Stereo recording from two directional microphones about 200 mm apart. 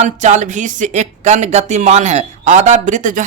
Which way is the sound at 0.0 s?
35° right (ahead or behind).